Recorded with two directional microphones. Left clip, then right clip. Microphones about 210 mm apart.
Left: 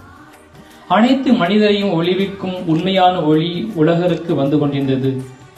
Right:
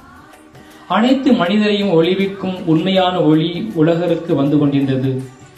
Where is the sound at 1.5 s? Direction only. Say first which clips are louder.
Left 1 dB; 30° right (ahead or behind).